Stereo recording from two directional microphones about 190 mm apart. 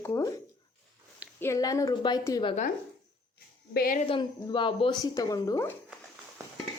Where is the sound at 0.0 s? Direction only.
15° left (ahead or behind).